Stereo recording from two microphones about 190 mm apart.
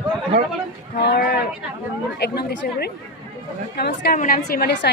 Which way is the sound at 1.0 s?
60° left (ahead or behind).